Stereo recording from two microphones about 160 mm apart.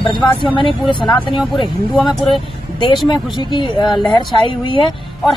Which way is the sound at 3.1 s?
25° left (ahead or behind).